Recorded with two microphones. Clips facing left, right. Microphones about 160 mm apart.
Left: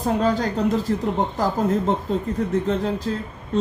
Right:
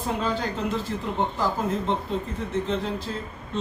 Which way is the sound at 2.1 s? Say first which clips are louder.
Left 5 dB; 40° left (ahead or behind).